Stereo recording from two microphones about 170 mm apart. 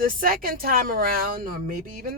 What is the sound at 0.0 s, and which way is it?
Speech, 55° right (ahead or behind).